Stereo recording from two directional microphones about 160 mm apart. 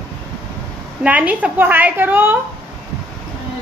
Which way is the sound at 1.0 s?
10° right (ahead or behind).